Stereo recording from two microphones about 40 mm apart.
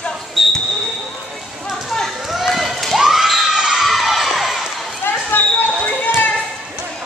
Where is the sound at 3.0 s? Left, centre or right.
Centre.